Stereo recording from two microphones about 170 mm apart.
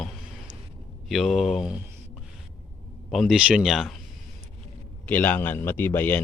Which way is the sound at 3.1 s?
Centre (ahead or behind).